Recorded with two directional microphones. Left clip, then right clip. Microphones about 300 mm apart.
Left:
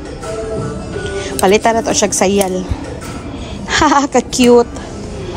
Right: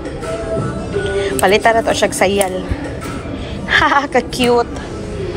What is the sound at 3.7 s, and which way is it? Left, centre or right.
Speech, left.